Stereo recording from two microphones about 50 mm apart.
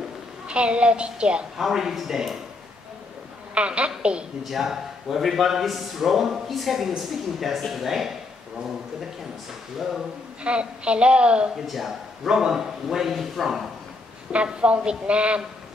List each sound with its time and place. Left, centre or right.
0.5 s a woman's voice: right
1.6 s a man's voice: centre
3.5 s a woman's voice: right
4.5 s a man's voice: centre
10.4 s a woman's voice: right
11.6 s a man's voice: centre
14.3 s a woman's voice: right